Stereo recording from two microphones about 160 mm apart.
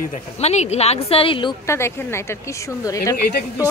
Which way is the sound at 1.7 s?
15° left (ahead or behind).